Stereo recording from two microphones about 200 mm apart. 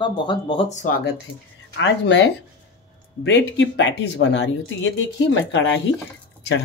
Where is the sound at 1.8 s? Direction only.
70° left (ahead or behind).